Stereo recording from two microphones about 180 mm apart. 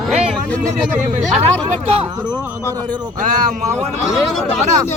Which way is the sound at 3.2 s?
45° right (ahead or behind).